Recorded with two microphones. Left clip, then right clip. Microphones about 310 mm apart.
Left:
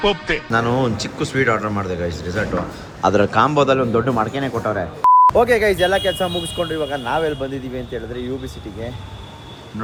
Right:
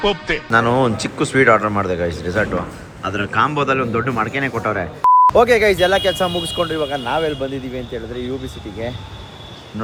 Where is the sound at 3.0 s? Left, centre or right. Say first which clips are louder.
Left 3 dB; centre.